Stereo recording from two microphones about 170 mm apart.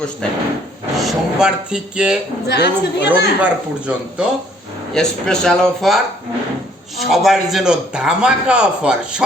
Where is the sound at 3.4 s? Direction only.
5° right (ahead or behind).